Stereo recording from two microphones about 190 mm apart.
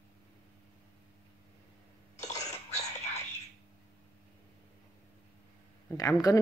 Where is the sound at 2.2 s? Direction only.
35° left (ahead or behind).